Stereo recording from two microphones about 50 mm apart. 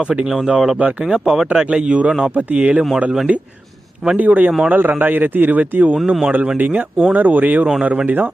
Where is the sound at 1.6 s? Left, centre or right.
Right.